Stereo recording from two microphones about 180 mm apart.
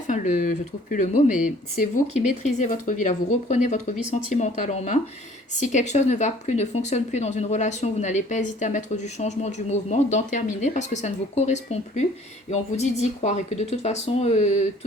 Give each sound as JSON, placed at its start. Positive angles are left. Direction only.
{"t": 0.1, "sound": "speech", "side_deg": 45}
{"t": 2.6, "sound": "speech", "side_deg": 40}